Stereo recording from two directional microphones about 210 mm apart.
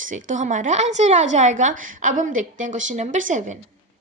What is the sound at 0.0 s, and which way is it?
A woman's voice, 35° right (ahead or behind).